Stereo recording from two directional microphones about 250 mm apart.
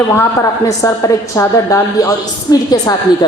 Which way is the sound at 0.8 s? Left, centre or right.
Centre.